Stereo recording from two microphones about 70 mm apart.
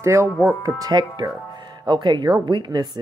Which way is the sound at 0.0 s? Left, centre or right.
Right.